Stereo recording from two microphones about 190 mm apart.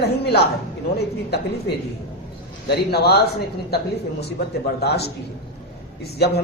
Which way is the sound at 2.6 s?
60° left (ahead or behind).